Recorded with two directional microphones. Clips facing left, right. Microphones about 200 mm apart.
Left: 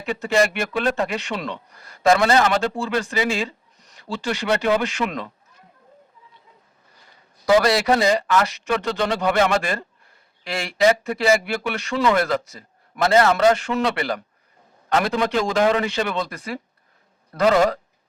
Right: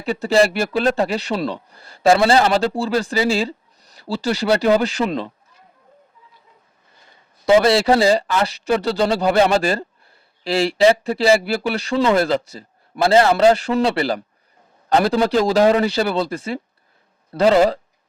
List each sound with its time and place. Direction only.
0.0 s speech: 35° right (ahead or behind)
7.4 s speech: 25° right (ahead or behind)